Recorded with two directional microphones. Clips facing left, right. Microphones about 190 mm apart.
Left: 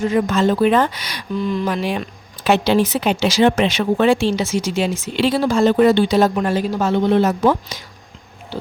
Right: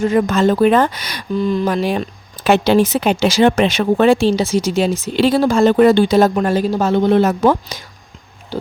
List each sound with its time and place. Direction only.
0.1 s speech: 50° right (ahead or behind)